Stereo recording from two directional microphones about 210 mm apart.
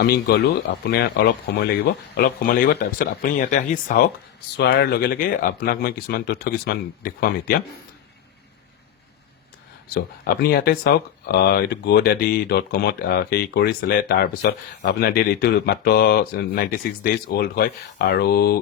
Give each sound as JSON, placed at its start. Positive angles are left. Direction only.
{"t": 0.0, "sound": "speech", "side_deg": 50}
{"t": 4.5, "sound": "speech", "side_deg": 50}
{"t": 9.9, "sound": "speech", "side_deg": 45}